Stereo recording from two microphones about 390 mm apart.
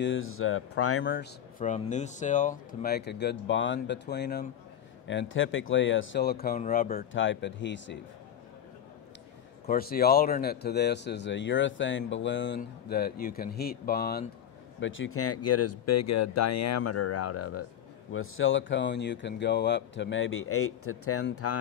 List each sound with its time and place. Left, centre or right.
0.0 s speech: left
9.7 s speech: left